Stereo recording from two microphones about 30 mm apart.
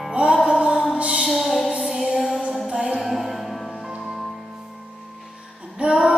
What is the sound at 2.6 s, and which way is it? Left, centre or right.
Music, right.